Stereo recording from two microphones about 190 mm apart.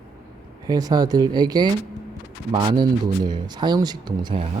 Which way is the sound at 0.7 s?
20° right (ahead or behind).